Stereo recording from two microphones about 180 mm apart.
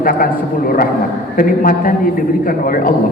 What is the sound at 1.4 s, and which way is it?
A man's voice, 50° left (ahead or behind).